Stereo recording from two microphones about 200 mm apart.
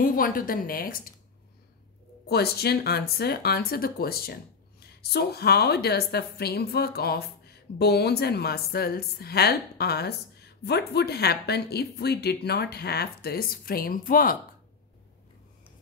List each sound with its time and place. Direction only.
0.0 s speech: 45° left (ahead or behind)
2.2 s speech: 50° left (ahead or behind)